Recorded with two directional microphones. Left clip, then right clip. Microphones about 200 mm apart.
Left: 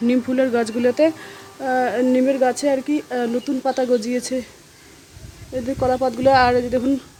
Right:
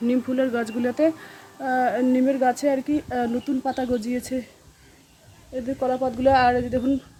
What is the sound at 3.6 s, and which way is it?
Speech, 15° left (ahead or behind).